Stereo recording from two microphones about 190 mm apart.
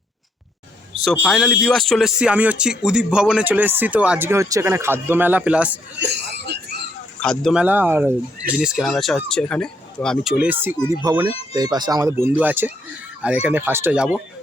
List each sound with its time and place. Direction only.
1.0 s a man's voice: centre (ahead or behind)
6.0 s cough: 65° right (ahead or behind)
7.2 s a man's voice: centre (ahead or behind)
10.3 s a man's voice: 10° right (ahead or behind)